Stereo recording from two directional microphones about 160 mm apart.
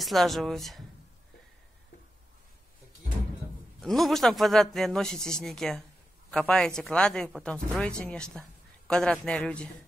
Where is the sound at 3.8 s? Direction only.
Centre (ahead or behind).